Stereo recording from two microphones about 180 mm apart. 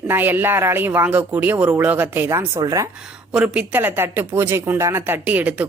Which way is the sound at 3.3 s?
5° right (ahead or behind).